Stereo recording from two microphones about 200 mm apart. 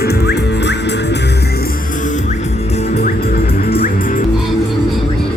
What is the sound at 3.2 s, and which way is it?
Music, 50° left (ahead or behind).